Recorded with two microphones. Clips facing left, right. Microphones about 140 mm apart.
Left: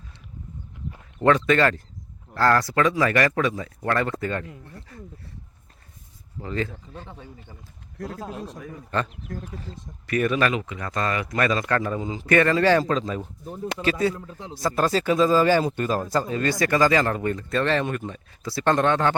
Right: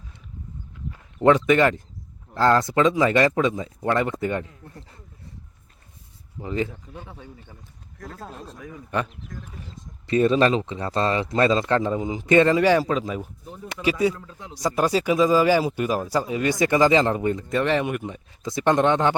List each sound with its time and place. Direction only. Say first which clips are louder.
1.2 s speech: right 2 dB; 20° right (ahead or behind)
4.9 s a sound: left 9 dB; 25° right (ahead or behind)
6.4 s speech: right 2 dB; 15° right (ahead or behind)
8.1 s speech: left 3 dB; 5° left (ahead or behind)
8.9 s speech: even; 15° right (ahead or behind)
10.1 s speech: right 4 dB; 25° right (ahead or behind); by 13.2 s 10° right (ahead or behind)
14.2 s a man's voice: left 3 dB; 25° left (ahead or behind)
14.5 s speech: right 1 dB; 15° right (ahead or behind)